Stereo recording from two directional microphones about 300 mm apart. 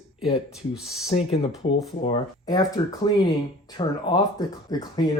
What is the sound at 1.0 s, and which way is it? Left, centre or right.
Speech, centre.